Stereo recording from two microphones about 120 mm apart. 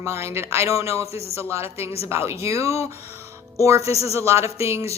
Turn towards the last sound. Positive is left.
turn(degrees=-25)  # may be behind; listen again after turning